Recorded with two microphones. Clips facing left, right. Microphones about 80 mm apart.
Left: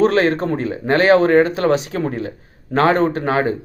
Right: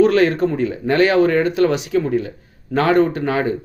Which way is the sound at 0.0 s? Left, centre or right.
Left.